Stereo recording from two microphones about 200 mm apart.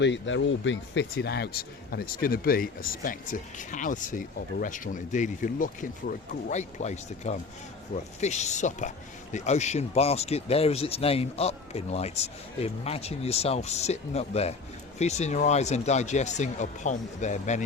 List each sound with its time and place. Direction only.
0.0 s speech: 70° left (ahead or behind); by 17.6 s 35° left (ahead or behind)